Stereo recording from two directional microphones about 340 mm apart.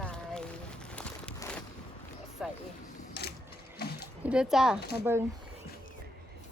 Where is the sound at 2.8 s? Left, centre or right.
Left.